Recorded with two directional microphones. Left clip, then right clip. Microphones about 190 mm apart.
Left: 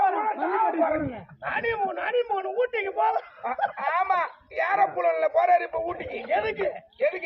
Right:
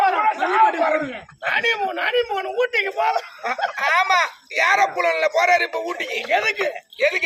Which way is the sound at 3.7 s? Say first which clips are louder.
Right 9 dB; 35° right (ahead or behind).